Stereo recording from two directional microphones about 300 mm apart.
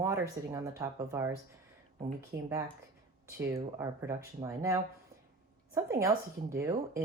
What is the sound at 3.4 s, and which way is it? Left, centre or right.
Speech, centre.